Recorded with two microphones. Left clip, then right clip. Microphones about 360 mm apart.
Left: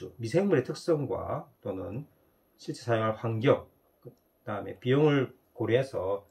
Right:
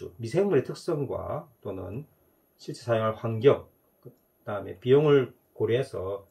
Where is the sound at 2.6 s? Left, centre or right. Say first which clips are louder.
Right 2 dB; centre.